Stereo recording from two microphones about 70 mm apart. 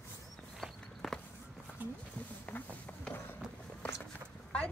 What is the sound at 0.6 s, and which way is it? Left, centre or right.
Walk, centre.